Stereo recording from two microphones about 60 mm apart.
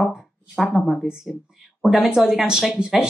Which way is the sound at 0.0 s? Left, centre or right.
Centre.